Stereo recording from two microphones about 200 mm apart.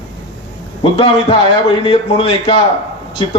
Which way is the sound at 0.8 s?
25° left (ahead or behind).